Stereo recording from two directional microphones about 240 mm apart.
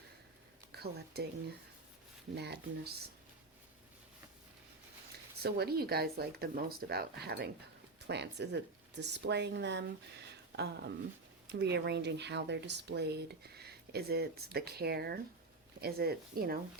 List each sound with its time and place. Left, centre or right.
0.7 s speech: right
2.3 s speech: right
5.4 s speech: right